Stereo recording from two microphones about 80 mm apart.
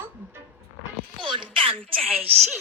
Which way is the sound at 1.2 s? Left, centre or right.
Right.